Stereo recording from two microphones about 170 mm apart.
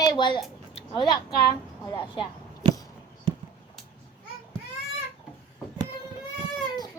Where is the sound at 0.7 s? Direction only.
25° left (ahead or behind).